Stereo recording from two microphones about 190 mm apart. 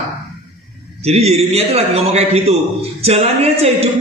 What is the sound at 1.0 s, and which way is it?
A man's voice, 35° right (ahead or behind).